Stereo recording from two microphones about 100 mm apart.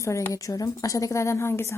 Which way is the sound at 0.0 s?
30° left (ahead or behind).